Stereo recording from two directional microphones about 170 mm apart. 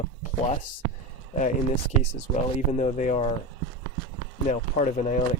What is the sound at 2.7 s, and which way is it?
Speech, 45° left (ahead or behind).